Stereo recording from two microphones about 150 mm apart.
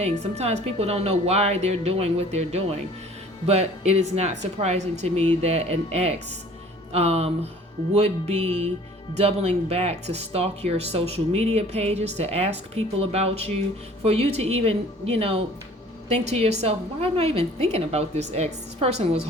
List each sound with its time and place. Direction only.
0.0 s a woman's voice: 45° right (ahead or behind)